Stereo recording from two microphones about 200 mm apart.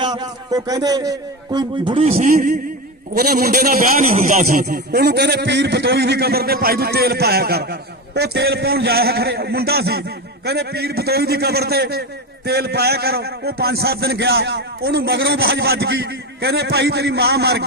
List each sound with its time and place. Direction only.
0.0 s a man's voice: 20° right (ahead or behind)
2.0 s a man's voice: 40° right (ahead or behind); by 17.6 s 55° right (ahead or behind)